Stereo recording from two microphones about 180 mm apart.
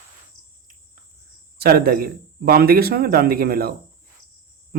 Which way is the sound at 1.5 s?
60° right (ahead or behind).